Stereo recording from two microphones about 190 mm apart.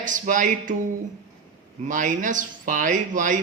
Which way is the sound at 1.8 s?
45° right (ahead or behind).